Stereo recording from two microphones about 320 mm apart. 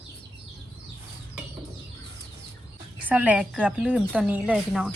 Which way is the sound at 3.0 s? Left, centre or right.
Centre.